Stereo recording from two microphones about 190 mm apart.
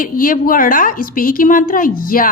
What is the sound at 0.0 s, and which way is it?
A woman's voice, 45° left (ahead or behind).